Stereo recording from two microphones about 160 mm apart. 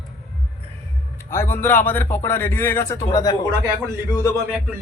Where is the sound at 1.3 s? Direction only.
15° left (ahead or behind).